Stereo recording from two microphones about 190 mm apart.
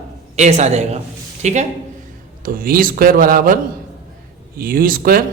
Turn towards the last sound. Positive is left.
turn(degrees=-50)  # may be behind; listen again after turning